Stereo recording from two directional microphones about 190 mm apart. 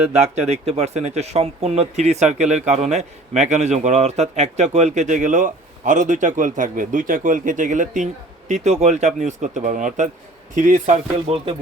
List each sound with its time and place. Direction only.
0.1 s speech: 35° right (ahead or behind)